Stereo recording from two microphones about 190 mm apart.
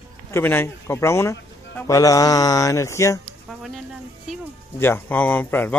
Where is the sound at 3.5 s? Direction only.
Centre (ahead or behind).